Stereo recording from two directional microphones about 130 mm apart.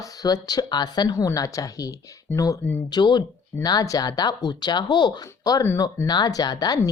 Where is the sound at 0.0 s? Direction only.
30° left (ahead or behind).